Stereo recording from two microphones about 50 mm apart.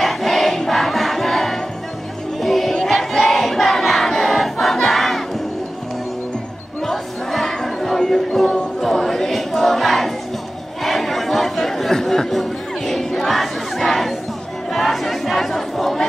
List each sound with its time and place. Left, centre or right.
0.0 s crowd: centre
2.4 s music: centre
2.7 s battle cry: centre
4.2 s crowd: centre
6.9 s music: centre
10.8 s chatter: centre
14.7 s crowd: centre